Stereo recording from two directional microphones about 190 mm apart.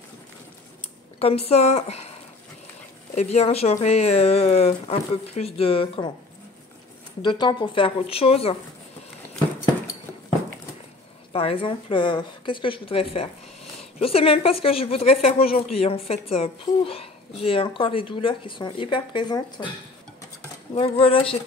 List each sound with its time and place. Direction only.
1.2 s speech: 30° left (ahead or behind)
3.2 s speech: 35° left (ahead or behind)
7.2 s speech: 25° left (ahead or behind)
11.3 s speech: 30° left (ahead or behind)
21.0 s speech: 30° left (ahead or behind)